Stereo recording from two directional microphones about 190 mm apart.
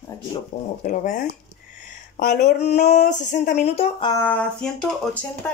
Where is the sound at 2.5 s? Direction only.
35° left (ahead or behind).